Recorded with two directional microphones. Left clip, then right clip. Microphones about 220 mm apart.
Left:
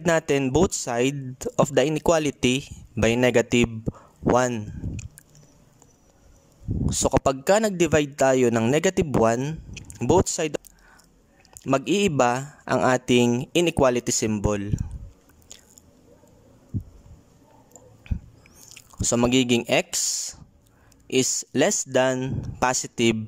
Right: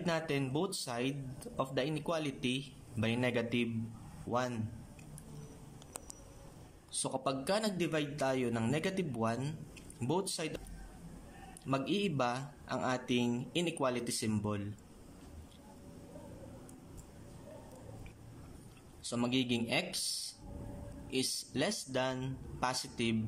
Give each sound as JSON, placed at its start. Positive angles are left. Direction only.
{"t": 0.0, "sound": "a man's voice", "side_deg": 50}
{"t": 6.9, "sound": "a man's voice", "side_deg": 55}
{"t": 11.6, "sound": "a man's voice", "side_deg": 50}
{"t": 18.1, "sound": "chewing", "side_deg": 45}
{"t": 18.9, "sound": "a man's voice", "side_deg": 50}